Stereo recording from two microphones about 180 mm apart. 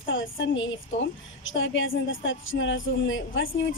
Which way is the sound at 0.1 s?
90° left.